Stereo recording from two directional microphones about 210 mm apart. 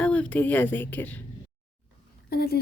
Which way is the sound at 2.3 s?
45° left (ahead or behind).